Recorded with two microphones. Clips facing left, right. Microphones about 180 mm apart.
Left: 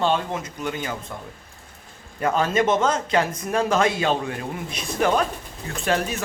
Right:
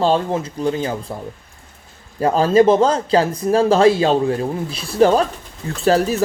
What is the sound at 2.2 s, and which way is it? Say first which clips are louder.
Speech: right 8 dB; 30° right (ahead or behind).